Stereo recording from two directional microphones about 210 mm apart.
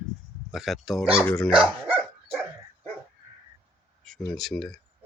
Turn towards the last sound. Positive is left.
turn(degrees=0)  # may be behind; listen again after turning